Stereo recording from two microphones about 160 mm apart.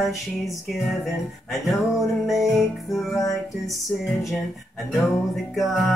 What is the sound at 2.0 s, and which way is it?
Music, centre (ahead or behind).